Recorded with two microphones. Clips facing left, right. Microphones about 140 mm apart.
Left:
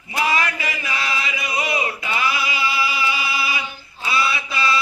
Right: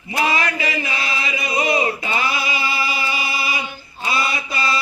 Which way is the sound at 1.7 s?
35° right (ahead or behind).